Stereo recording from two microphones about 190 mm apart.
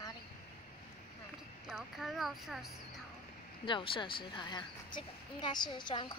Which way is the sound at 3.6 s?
25° left (ahead or behind).